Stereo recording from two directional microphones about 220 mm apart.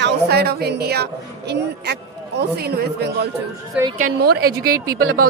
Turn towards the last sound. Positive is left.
turn(degrees=-75)  # may be behind; listen again after turning